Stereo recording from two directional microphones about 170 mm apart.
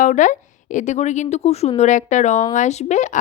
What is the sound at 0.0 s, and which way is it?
A woman's voice, 45° left (ahead or behind).